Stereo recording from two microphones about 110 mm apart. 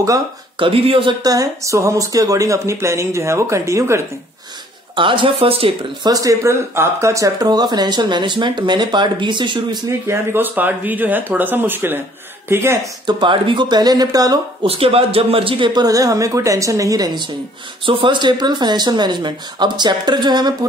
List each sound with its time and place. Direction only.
0.6 s speech: 55° right (ahead or behind)
1.2 s speech: 30° right (ahead or behind)
4.9 s speech: 50° right (ahead or behind)
6.0 s speech: 30° right (ahead or behind)
10.0 s speech: 20° right (ahead or behind)
13.0 s speech: 45° right (ahead or behind)
14.6 s speech: 60° right (ahead or behind); by 17.3 s 40° right (ahead or behind)
17.8 s speech: 50° right (ahead or behind)